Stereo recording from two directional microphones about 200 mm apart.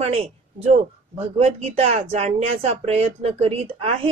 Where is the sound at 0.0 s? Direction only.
30° right (ahead or behind).